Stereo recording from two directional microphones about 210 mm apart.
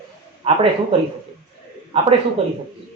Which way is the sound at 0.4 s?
25° right (ahead or behind).